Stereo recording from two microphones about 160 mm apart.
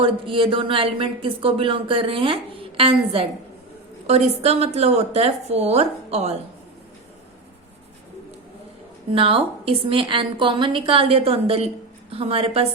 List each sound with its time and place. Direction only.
0.0 s speech: 35° right (ahead or behind)
9.1 s speech: 35° right (ahead or behind)